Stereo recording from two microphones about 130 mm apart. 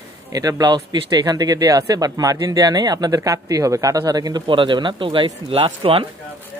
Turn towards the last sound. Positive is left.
turn(degrees=-45)  # may be behind; listen again after turning